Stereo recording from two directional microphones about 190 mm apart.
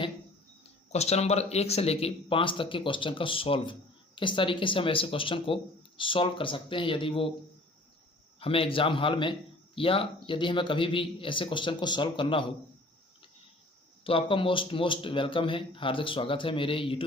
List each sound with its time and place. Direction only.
0.6 s speech: 35° left (ahead or behind)
8.4 s speech: 30° left (ahead or behind)
14.0 s speech: 30° left (ahead or behind)